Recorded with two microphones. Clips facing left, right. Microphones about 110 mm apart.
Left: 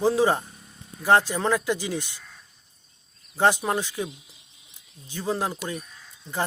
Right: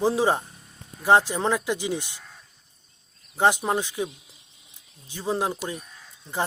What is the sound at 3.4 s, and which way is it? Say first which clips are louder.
Speech: even; 15° right (ahead or behind).